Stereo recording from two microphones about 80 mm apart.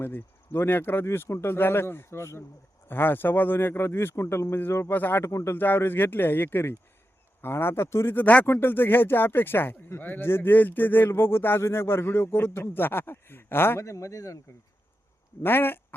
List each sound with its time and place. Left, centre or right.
0.0 s speech: left
5.2 s speech: left
5.5 s speech: left
13.8 s speech: left
15.4 s speech: left